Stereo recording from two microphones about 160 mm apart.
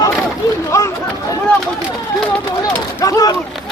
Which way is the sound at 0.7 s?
20° left (ahead or behind).